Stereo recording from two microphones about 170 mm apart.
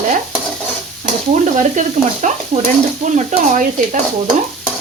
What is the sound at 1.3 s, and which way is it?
Speech, 45° right (ahead or behind).